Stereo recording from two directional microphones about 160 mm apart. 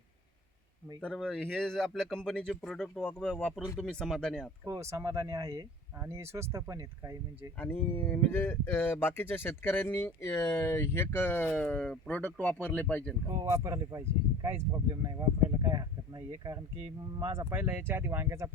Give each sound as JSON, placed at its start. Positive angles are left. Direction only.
{"t": 1.0, "sound": "speech", "side_deg": 5}
{"t": 4.6, "sound": "speech", "side_deg": -20}
{"t": 7.6, "sound": "speech", "side_deg": 15}
{"t": 13.4, "sound": "speech", "side_deg": -20}
{"t": 17.3, "sound": "speech", "side_deg": -10}